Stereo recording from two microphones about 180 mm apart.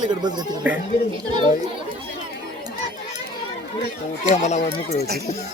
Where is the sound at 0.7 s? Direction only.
10° right (ahead or behind).